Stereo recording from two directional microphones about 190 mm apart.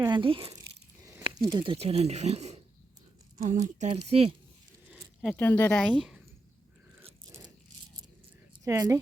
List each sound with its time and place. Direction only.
0.0 s speech: 25° right (ahead or behind); by 3.9 s 40° right (ahead or behind)
3.9 s speech: 30° right (ahead or behind)
4.9 s zipper: 5° right (ahead or behind)
5.3 s speech: 10° left (ahead or behind)
8.6 s speech: 15° right (ahead or behind)